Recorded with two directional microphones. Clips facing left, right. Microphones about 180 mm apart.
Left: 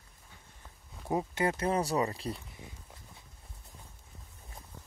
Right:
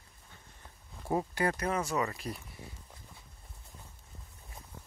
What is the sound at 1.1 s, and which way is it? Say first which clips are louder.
Speech: even; 20° left (ahead or behind).